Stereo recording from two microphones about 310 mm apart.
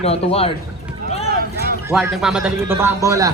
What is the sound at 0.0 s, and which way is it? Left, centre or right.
Speech, centre.